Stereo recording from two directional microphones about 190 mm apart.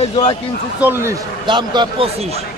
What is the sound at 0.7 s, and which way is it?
Speech, 10° right (ahead or behind).